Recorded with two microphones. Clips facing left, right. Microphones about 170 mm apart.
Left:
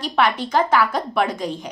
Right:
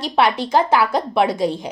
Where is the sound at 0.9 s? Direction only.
30° right (ahead or behind).